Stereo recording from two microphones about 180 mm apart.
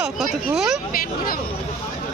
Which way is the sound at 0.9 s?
55° left (ahead or behind).